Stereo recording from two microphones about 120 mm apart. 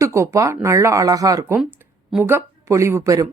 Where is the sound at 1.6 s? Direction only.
5° right (ahead or behind).